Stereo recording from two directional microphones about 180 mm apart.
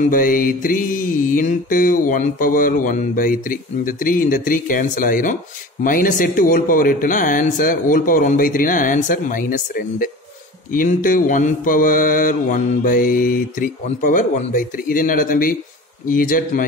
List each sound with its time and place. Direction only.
0.1 s mantra: 50° left (ahead or behind)